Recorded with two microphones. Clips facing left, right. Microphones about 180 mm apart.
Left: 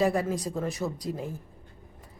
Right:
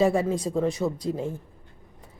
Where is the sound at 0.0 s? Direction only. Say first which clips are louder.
Right 4 dB; centre (ahead or behind).